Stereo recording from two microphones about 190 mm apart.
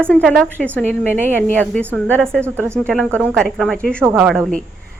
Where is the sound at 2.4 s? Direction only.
15° right (ahead or behind).